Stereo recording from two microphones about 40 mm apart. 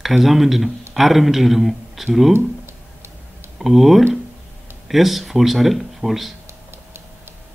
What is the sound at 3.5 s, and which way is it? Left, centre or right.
Speech, centre.